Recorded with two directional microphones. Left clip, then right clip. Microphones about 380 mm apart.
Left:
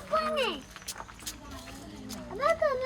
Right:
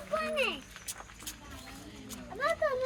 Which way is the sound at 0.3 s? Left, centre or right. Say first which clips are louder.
Left 2 dB; left.